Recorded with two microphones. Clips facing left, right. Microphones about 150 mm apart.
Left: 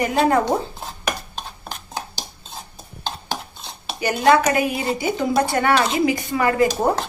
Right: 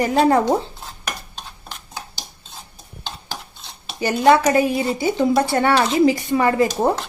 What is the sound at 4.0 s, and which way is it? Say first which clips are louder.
A woman's voice: right 2 dB; 30° right (ahead or behind).